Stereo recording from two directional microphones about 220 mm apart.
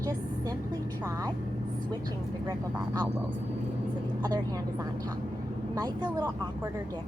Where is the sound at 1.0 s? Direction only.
15° right (ahead or behind).